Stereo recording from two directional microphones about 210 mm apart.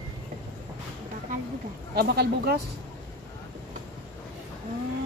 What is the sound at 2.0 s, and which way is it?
Speech, 50° right (ahead or behind).